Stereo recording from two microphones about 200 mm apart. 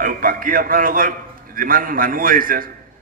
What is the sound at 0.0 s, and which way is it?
A man's voice, 45° right (ahead or behind).